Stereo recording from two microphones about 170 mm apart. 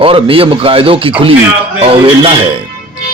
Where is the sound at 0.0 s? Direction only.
30° right (ahead or behind).